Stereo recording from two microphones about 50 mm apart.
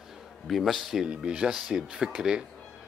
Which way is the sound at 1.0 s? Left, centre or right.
Centre.